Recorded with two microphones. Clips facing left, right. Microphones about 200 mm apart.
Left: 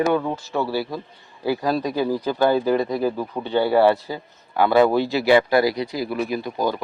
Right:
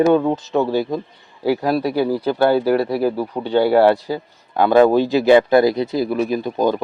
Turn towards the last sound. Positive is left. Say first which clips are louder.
# right 5 dB
turn(degrees=-20)  # may be behind; listen again after turning